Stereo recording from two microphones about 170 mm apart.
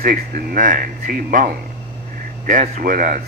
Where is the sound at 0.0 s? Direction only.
55° right (ahead or behind).